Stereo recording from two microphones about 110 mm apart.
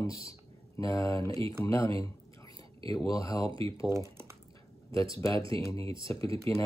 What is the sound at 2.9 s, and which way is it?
Speech, 35° left (ahead or behind).